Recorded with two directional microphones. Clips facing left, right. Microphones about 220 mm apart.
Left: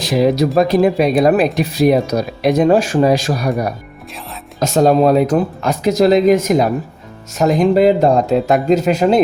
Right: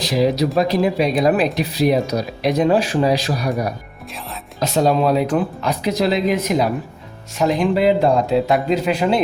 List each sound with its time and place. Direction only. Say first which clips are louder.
0.0 s speech: left 3 dB; 50° left (ahead or behind)
4.6 s speech: left 5 dB; 45° left (ahead or behind)